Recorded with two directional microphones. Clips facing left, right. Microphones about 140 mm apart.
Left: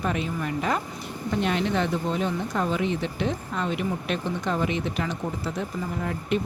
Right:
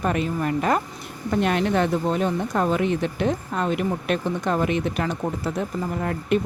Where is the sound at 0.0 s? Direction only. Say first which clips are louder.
Right 4 dB; 50° right (ahead or behind).